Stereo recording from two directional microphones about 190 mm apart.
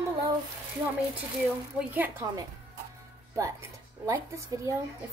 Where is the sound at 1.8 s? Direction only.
10° right (ahead or behind).